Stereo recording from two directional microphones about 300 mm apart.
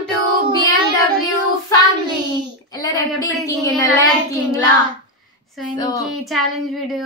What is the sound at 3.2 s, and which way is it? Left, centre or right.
Speech, centre.